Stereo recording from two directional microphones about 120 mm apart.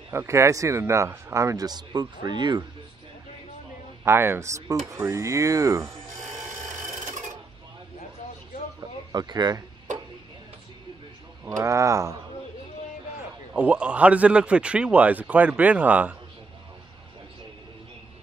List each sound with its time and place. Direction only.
0.1 s speech: 25° right (ahead or behind); by 2.6 s 40° right (ahead or behind)
4.0 s speech: 20° right (ahead or behind)
9.1 s speech: 35° right (ahead or behind)
11.4 s speech: 25° right (ahead or behind)
13.5 s a man's voice: 10° right (ahead or behind)